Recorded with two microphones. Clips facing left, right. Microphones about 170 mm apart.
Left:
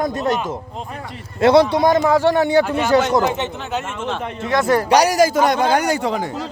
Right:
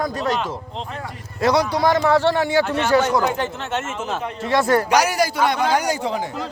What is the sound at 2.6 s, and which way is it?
Speech, 5° left (ahead or behind).